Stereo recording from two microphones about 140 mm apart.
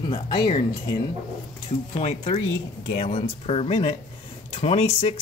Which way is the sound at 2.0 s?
45° left (ahead or behind).